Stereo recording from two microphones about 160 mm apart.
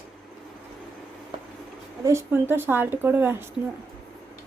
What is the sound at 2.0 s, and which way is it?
Speech, 15° right (ahead or behind).